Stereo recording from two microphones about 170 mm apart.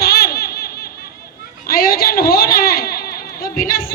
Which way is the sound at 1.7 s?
60° left (ahead or behind).